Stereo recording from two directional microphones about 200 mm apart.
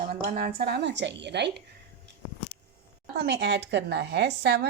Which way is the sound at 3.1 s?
55° right (ahead or behind).